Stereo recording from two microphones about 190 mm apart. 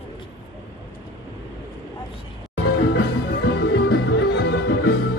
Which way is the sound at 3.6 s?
65° left (ahead or behind).